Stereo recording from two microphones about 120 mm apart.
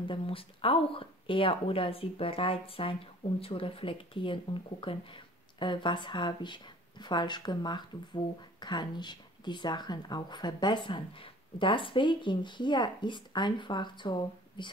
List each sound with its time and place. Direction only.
0.1 s speech: 50° left (ahead or behind)